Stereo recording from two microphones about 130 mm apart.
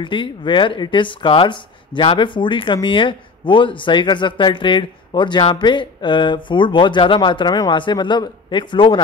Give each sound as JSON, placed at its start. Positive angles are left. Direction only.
{"t": 0.0, "sound": "speech", "side_deg": 40}